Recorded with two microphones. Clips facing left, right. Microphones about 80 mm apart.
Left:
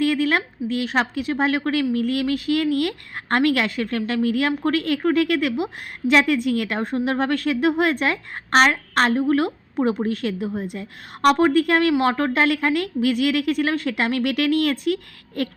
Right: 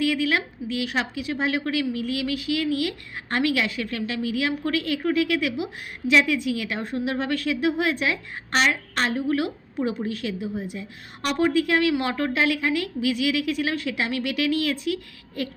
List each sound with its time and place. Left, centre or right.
0.0 s a woman's voice: left